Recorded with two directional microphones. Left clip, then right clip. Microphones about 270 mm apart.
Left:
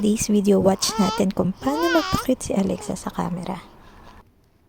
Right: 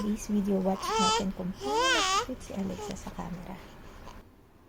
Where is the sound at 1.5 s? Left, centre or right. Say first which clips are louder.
Left 4 dB; centre.